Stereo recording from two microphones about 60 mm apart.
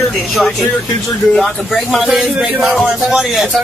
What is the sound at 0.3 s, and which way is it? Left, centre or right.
A woman's voice, centre.